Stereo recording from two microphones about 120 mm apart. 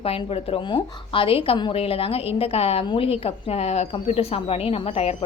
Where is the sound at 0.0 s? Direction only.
55° left (ahead or behind).